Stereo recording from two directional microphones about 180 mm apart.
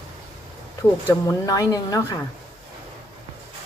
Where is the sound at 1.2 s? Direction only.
20° left (ahead or behind).